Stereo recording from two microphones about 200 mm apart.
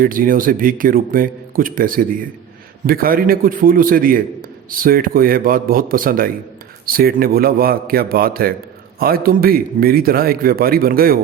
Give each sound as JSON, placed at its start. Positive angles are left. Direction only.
{"t": 0.0, "sound": "a man's voice", "side_deg": -45}